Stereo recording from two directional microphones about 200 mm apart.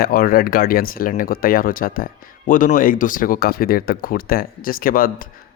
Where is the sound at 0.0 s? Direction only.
45° left (ahead or behind).